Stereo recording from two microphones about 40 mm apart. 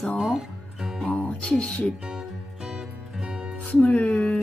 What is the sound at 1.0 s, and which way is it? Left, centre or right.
Speech, left.